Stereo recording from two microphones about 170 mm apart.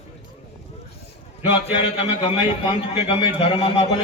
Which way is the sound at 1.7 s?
30° left (ahead or behind).